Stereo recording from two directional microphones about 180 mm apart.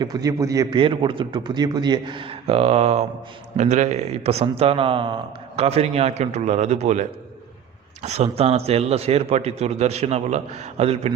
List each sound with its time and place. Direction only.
0.0 s a man's voice: 20° right (ahead or behind); by 11.1 s 35° right (ahead or behind)